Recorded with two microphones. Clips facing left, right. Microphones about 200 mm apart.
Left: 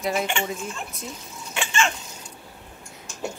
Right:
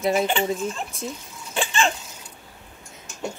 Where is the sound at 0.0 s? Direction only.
30° right (ahead or behind).